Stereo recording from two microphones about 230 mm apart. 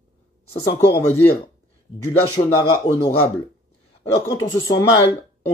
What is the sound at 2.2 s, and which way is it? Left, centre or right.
Speech, centre.